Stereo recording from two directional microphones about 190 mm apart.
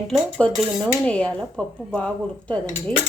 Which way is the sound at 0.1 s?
Centre (ahead or behind).